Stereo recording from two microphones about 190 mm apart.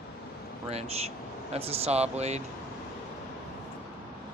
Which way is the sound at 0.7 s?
35° right (ahead or behind).